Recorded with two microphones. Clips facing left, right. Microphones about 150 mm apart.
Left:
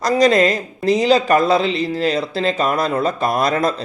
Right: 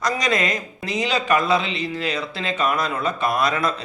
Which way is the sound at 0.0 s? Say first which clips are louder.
Left 9 dB; 35° left (ahead or behind).